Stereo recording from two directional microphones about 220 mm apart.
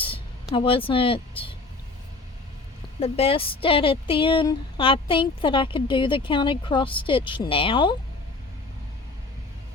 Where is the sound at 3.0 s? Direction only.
25° left (ahead or behind).